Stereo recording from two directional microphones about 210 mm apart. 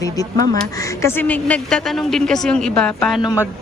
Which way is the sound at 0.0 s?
15° left (ahead or behind).